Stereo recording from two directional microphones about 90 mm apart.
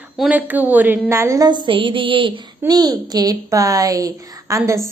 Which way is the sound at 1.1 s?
30° right (ahead or behind).